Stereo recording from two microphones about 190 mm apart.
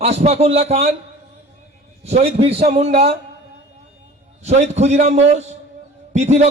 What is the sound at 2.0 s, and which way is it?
A man's voice, 35° right (ahead or behind).